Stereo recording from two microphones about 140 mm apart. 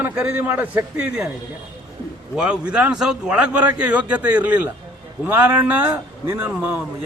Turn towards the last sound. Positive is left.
turn(degrees=-15)  # may be behind; listen again after turning